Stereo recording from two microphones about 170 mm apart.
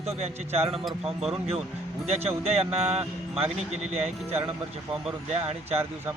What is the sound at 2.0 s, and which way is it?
Speech, 35° right (ahead or behind).